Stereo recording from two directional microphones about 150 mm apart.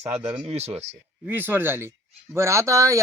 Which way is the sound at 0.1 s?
20° right (ahead or behind).